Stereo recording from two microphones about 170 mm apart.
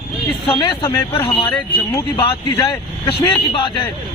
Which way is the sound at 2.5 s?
20° left (ahead or behind).